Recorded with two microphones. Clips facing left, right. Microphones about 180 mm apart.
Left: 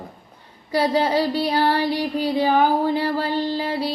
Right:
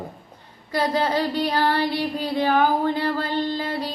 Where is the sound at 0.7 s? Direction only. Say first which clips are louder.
Left 3 dB; 10° left (ahead or behind).